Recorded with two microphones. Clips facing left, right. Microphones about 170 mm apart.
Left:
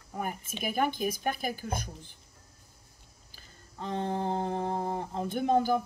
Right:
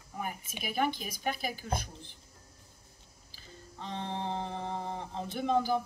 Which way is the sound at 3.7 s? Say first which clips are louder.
Left 6 dB; 45° left (ahead or behind).